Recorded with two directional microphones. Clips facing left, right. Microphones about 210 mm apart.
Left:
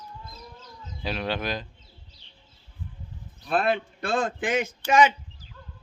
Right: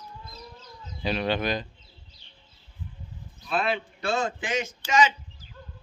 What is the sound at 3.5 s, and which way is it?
A man's voice, 50° left (ahead or behind).